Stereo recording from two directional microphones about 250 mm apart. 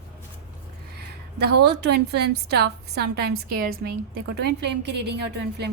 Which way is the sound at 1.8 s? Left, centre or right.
Right.